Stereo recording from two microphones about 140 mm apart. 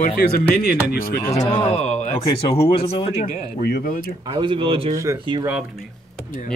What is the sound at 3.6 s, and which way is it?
Speech, 90° left.